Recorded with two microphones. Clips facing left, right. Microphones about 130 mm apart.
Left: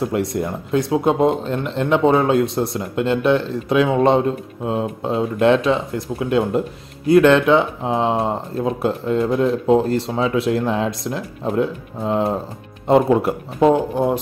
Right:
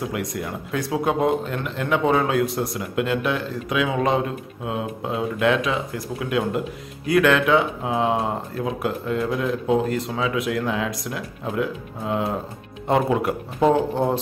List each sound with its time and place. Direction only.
0.1 s speech: 30° left (ahead or behind); by 14.1 s 15° left (ahead or behind)